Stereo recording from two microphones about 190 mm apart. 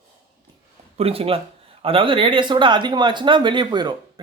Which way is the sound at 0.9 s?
30° right (ahead or behind).